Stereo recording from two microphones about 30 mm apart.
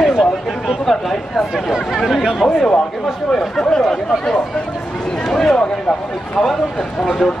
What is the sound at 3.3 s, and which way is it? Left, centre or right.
Speech, left.